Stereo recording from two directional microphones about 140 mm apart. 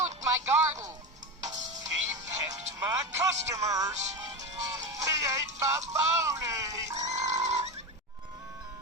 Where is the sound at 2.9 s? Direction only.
20° right (ahead or behind).